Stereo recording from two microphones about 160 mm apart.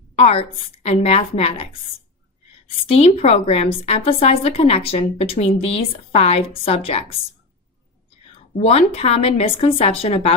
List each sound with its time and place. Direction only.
0.2 s a woman's voice: 40° left (ahead or behind)
2.8 s a woman's voice: 40° left (ahead or behind)
8.5 s a woman's voice: 40° left (ahead or behind)